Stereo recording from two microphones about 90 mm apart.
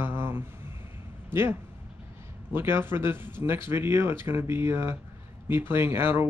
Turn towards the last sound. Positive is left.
turn(degrees=-25)  # may be behind; listen again after turning